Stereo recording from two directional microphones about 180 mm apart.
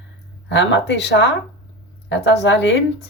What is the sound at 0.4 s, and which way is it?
Speech, 75° left (ahead or behind).